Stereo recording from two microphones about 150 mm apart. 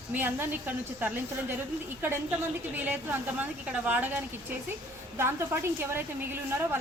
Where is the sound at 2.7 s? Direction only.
10° right (ahead or behind).